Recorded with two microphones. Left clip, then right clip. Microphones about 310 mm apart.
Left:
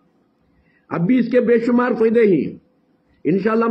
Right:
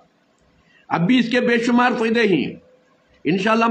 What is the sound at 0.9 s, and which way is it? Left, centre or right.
A man's voice, centre.